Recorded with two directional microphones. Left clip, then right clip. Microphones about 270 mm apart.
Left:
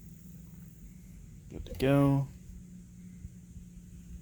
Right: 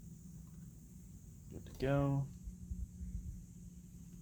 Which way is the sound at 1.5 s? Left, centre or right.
Left.